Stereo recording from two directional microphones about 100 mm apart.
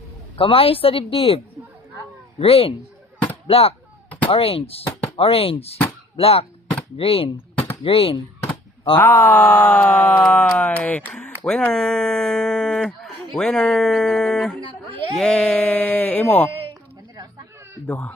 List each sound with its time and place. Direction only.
0.3 s speech: 65° left (ahead or behind)
2.4 s speech: 75° left (ahead or behind)
3.4 s a sound: 75° left (ahead or behind)
4.3 s speech: 75° left (ahead or behind)
9.0 s speech: 20° left (ahead or behind)
11.1 s a sound: 5° left (ahead or behind)
11.7 s speech: 5° left (ahead or behind)
17.8 s speech: 15° left (ahead or behind)